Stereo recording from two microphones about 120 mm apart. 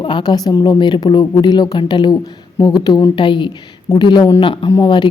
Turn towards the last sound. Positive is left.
turn(degrees=35)  # may be behind; listen again after turning